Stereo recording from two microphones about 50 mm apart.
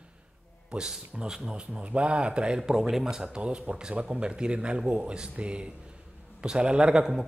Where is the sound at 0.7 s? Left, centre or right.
Centre.